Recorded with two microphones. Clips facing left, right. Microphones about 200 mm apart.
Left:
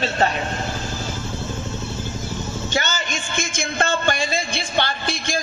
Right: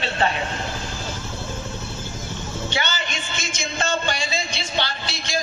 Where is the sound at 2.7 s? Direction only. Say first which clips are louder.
Left 3 dB; 45° left (ahead or behind).